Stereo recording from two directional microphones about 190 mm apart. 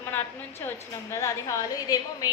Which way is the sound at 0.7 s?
15° left (ahead or behind).